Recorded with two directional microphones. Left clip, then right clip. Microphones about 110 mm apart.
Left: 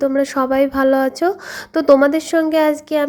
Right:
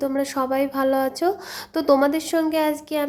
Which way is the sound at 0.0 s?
35° left (ahead or behind).